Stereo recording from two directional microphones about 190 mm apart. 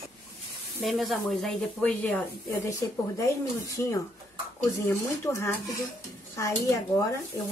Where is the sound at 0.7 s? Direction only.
Centre (ahead or behind); by 7.2 s 15° left (ahead or behind).